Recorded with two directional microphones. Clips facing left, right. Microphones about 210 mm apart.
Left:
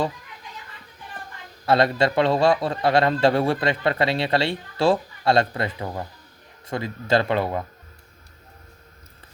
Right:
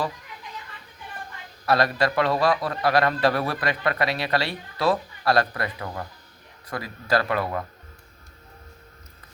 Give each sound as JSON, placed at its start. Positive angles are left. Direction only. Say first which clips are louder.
{"t": 1.6, "sound": "a man's voice", "louder": "left 3 dB", "side_deg": 25}